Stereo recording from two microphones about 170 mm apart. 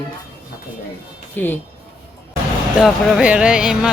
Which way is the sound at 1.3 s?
10° left (ahead or behind).